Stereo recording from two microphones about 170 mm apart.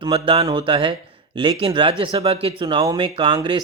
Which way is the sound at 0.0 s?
35° right (ahead or behind).